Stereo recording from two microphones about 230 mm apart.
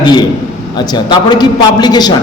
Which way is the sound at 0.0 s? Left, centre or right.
Centre.